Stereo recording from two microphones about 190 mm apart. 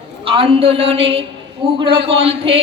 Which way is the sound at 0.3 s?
30° right (ahead or behind).